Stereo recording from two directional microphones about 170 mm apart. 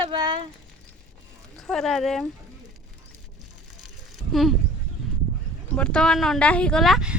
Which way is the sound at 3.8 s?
Centre (ahead or behind).